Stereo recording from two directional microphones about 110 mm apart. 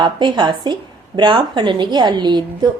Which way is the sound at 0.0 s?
45° right (ahead or behind).